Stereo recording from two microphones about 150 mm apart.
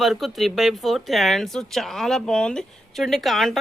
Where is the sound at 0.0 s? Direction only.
Centre (ahead or behind).